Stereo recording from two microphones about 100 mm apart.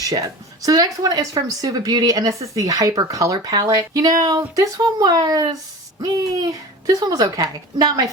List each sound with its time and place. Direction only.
0.0 s speech: 35° right (ahead or behind)